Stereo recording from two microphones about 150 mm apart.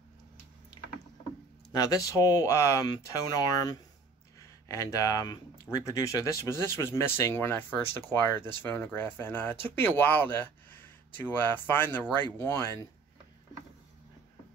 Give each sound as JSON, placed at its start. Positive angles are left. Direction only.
{"t": 1.7, "sound": "speech", "side_deg": 25}